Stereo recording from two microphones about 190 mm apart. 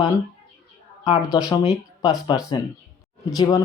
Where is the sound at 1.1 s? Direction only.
30° left (ahead or behind).